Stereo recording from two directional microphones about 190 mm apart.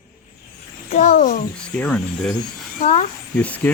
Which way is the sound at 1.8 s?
5° left (ahead or behind).